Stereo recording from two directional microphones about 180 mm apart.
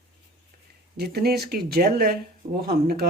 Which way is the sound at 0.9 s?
60° right (ahead or behind).